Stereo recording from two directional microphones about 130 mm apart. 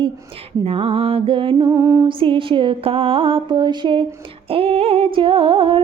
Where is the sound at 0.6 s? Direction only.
45° right (ahead or behind); by 2.0 s 25° right (ahead or behind).